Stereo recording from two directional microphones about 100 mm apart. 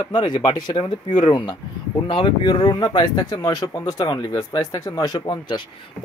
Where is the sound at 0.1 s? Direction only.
50° left (ahead or behind).